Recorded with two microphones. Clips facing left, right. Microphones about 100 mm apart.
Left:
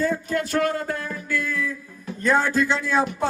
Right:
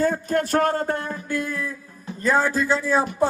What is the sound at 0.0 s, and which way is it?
Speech, 50° right (ahead or behind).